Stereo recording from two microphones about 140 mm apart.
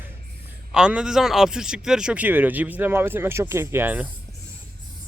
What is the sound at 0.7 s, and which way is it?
Speech, 5° right (ahead or behind).